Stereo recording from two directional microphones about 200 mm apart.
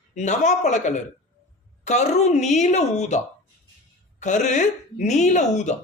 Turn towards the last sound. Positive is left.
turn(degrees=35)  # may be behind; listen again after turning